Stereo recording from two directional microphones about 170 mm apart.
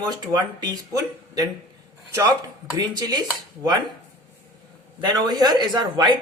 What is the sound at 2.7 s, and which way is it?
Speech, 25° right (ahead or behind).